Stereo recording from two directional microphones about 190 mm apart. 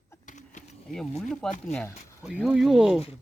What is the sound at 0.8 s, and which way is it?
Speech, centre (ahead or behind).